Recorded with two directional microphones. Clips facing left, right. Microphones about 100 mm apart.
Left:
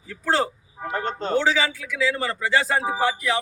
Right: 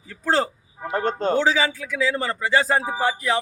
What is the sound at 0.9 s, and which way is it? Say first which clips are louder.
A man's voice: right 3 dB; 40° right (ahead or behind).